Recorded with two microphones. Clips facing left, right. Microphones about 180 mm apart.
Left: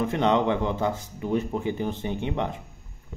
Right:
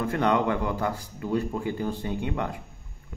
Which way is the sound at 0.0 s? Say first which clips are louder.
Left 2 dB; 20° left (ahead or behind).